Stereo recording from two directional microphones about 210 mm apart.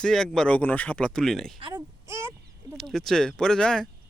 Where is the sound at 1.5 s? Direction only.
25° right (ahead or behind).